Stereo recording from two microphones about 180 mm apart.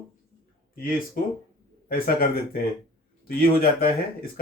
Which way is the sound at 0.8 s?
50° left (ahead or behind).